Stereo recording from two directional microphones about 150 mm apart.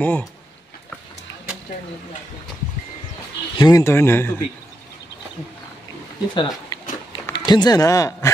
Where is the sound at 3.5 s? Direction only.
25° left (ahead or behind).